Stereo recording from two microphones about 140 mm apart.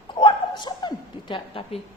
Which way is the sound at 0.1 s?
35° left (ahead or behind).